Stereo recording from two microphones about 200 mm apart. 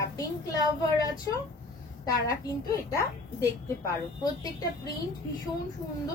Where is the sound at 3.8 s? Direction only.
20° left (ahead or behind).